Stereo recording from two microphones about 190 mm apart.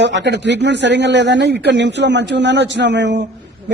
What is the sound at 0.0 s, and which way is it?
A man's voice, 70° right (ahead or behind).